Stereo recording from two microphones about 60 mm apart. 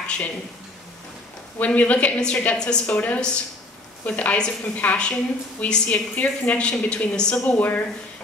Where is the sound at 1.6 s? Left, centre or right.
Left.